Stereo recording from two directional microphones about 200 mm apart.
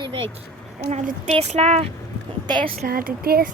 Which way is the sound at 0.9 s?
35° right (ahead or behind).